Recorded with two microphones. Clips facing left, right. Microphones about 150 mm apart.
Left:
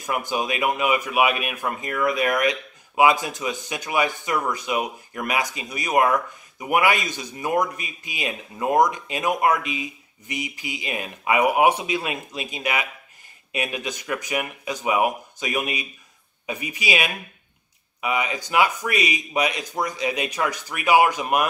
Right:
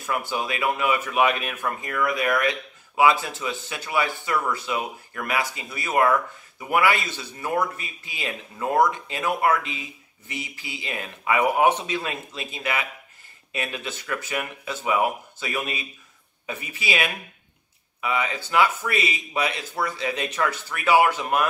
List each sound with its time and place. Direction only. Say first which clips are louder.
0.0 s speech: left 2 dB; 15° left (ahead or behind)